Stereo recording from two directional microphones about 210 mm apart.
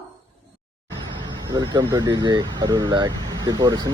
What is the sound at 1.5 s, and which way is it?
Speech, 20° right (ahead or behind).